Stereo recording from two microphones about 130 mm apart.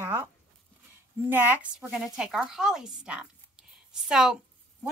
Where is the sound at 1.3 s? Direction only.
15° right (ahead or behind).